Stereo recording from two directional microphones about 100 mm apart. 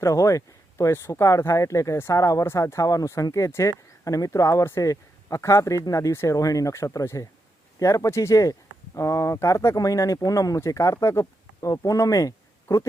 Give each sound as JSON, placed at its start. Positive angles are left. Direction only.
{"t": 0.0, "sound": "speech", "side_deg": 35}